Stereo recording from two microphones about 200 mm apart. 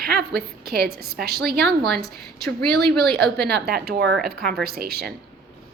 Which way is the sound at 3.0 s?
55° right (ahead or behind).